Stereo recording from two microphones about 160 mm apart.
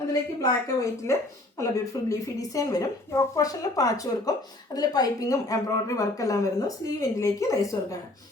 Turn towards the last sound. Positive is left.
turn(degrees=20)  # may be behind; listen again after turning